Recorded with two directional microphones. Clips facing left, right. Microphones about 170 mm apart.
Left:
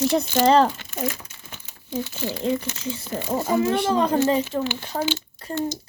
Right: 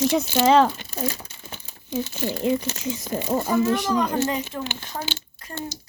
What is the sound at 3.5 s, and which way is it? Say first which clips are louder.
A child's voice: left 2 dB; 25° left (ahead or behind).